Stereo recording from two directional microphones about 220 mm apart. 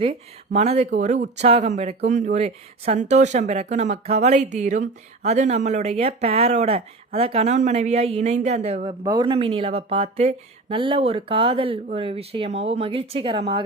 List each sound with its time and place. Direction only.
0.0 s speech: 25° right (ahead or behind)